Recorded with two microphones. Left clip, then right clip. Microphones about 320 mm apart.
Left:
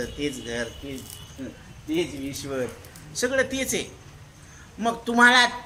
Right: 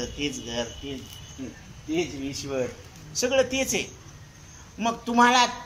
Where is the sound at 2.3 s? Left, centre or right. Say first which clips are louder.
Right 1 dB; centre.